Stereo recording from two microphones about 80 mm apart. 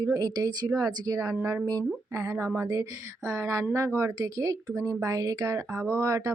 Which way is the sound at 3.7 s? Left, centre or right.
Right.